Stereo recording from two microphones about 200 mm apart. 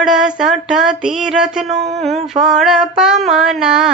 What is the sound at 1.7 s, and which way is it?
Speech, 35° right (ahead or behind).